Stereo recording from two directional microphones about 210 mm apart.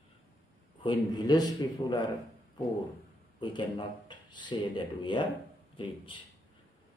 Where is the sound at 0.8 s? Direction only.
20° left (ahead or behind).